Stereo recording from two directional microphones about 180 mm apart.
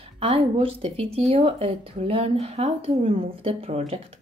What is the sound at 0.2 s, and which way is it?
Speech, 30° right (ahead or behind).